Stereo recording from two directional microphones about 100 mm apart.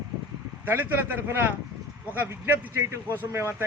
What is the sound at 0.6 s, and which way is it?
A man's voice, 20° right (ahead or behind).